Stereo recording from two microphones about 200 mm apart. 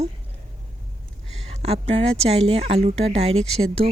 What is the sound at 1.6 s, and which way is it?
Speech, 30° right (ahead or behind).